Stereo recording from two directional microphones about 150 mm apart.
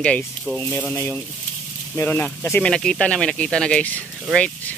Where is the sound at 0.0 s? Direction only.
5° left (ahead or behind).